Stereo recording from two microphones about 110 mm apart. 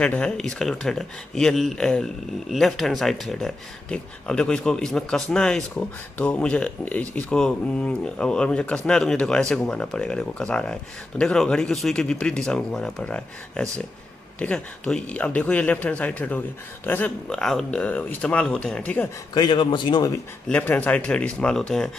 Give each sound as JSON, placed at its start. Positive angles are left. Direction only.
{"t": 0.0, "sound": "speech", "side_deg": 10}
{"t": 17.3, "sound": "speech", "side_deg": 5}
{"t": 19.3, "sound": "a man's voice", "side_deg": 40}
{"t": 20.4, "sound": "speech", "side_deg": 15}